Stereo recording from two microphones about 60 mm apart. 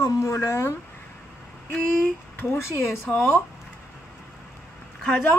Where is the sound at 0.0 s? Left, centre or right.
Left.